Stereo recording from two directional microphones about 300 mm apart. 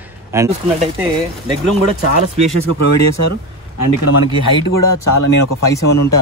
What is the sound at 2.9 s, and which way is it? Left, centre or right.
Speech, left.